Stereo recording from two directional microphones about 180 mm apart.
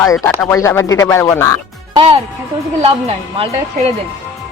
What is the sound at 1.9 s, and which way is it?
A woman's voice, 30° right (ahead or behind).